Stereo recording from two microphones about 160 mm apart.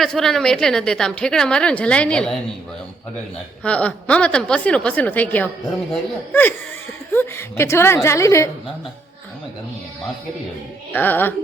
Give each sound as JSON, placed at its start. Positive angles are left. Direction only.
{"t": 0.0, "sound": "a woman's voice", "side_deg": 0}
{"t": 3.6, "sound": "a woman's voice", "side_deg": 10}
{"t": 10.9, "sound": "a woman's voice", "side_deg": 10}